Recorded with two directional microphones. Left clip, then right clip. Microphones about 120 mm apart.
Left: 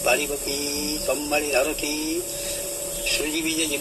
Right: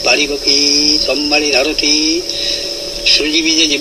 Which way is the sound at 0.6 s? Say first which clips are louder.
Right 14 dB; 15° right (ahead or behind).